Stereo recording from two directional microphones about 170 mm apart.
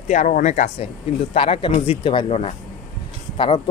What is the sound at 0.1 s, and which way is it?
Speech, 45° left (ahead or behind).